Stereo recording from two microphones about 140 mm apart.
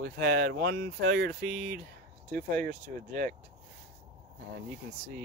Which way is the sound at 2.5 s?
75° right (ahead or behind).